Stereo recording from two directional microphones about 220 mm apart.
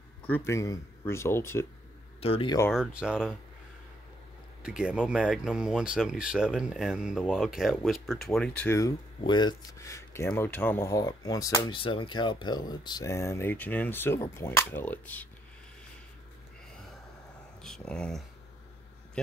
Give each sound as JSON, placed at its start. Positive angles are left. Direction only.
{"t": 0.3, "sound": "speech", "side_deg": 10}
{"t": 2.1, "sound": "speech", "side_deg": 25}
{"t": 2.7, "sound": "speech", "side_deg": -5}
{"t": 4.6, "sound": "speech", "side_deg": -5}
{"t": 17.6, "sound": "speech", "side_deg": 0}